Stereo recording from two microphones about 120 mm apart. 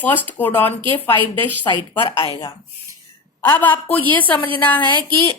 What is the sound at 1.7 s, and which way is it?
Speech, 45° left (ahead or behind).